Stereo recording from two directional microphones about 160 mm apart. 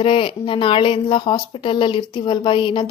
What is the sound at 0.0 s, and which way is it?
A woman's voice, 35° left (ahead or behind).